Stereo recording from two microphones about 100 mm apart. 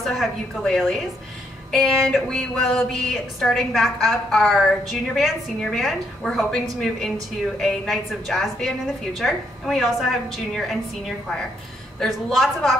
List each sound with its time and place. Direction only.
0.0 s speech: centre (ahead or behind)